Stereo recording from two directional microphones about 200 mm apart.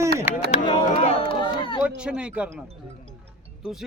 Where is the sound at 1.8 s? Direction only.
5° right (ahead or behind).